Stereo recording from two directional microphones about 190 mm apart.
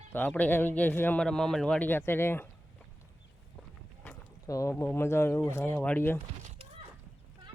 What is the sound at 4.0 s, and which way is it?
Speech, 15° left (ahead or behind).